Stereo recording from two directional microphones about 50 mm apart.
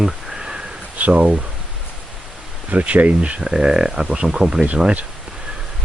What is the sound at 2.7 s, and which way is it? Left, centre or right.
Speech, right.